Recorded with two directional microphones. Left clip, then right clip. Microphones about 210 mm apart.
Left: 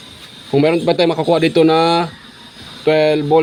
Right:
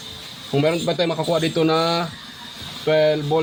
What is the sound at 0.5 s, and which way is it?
Speech, 35° left (ahead or behind).